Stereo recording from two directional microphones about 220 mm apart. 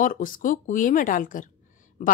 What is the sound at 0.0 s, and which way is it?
A woman's voice, 40° left (ahead or behind).